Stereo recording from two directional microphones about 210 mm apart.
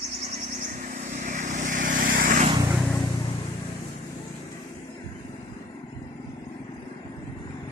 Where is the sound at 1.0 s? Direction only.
35° right (ahead or behind).